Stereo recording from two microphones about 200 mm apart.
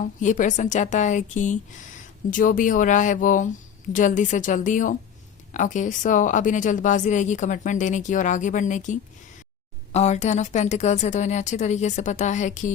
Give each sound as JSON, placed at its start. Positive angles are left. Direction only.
{"t": 0.2, "sound": "a woman's voice", "side_deg": 40}